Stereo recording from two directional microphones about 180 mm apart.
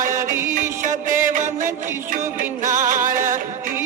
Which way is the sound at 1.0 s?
45° right (ahead or behind).